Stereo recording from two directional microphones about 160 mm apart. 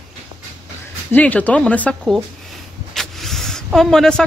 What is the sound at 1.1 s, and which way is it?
Speech, 10° left (ahead or behind).